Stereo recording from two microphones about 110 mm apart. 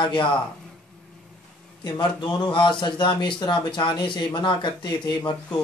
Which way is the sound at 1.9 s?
45° left (ahead or behind).